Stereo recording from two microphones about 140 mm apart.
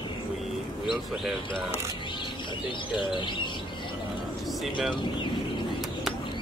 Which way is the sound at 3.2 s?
35° left (ahead or behind).